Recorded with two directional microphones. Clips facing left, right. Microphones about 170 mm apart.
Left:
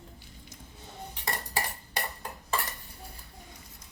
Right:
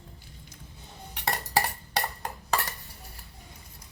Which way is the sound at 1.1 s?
80° right.